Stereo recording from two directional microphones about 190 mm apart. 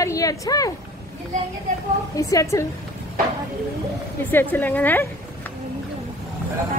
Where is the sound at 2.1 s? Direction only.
15° left (ahead or behind).